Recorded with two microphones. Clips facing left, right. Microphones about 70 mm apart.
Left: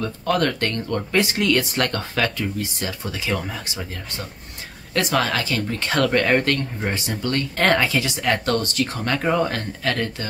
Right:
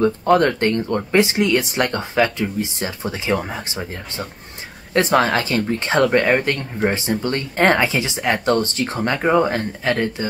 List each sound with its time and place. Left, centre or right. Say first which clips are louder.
0.0 s speech: right 6 dB; right